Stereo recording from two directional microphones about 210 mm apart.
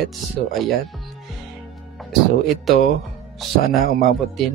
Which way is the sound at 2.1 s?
Centre (ahead or behind).